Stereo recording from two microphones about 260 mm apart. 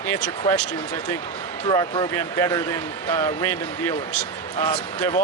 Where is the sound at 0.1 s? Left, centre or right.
Centre.